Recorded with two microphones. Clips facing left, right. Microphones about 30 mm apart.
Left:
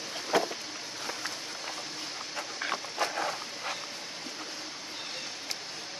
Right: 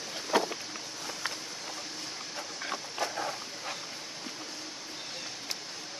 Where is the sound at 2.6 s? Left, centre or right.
Left.